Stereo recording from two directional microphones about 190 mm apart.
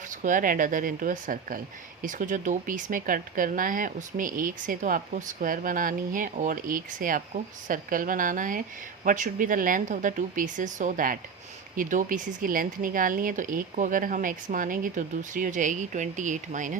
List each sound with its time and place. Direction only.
0.1 s speech: 45° right (ahead or behind)